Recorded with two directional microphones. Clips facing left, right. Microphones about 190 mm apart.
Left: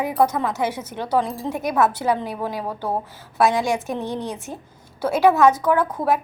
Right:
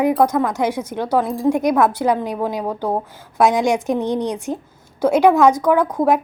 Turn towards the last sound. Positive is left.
turn(degrees=-15)  # may be behind; listen again after turning